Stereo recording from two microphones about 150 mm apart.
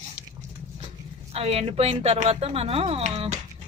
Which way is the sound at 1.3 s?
45° right (ahead or behind).